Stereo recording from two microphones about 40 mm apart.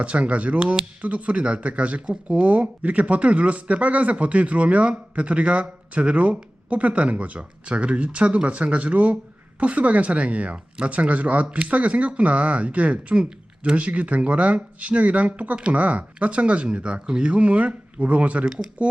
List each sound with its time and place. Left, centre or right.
0.0 s speech: right
18.4 s speech: centre